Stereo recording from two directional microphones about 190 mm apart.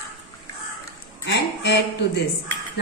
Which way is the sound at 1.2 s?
65° left (ahead or behind).